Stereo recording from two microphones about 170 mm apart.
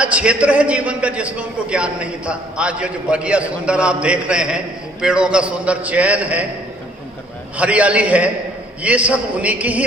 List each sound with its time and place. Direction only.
0.0 s a man's voice: 5° right (ahead or behind)
7.5 s a man's voice: 10° right (ahead or behind)